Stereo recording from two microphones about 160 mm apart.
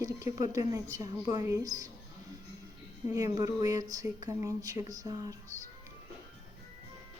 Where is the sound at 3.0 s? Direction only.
20° right (ahead or behind).